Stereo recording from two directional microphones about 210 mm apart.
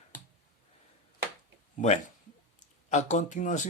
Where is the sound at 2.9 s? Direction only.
35° left (ahead or behind).